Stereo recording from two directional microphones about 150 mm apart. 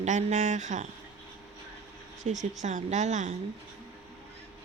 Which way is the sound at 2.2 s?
50° right (ahead or behind).